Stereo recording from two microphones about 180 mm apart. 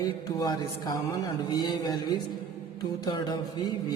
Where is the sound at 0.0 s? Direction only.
20° left (ahead or behind).